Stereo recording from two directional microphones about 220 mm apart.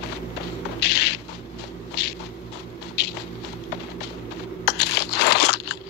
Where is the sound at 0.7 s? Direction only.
50° left (ahead or behind).